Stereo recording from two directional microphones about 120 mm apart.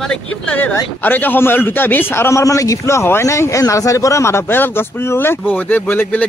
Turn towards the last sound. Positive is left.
turn(degrees=15)  # may be behind; listen again after turning